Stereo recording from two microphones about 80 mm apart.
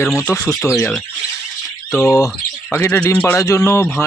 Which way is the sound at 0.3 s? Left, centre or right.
Left.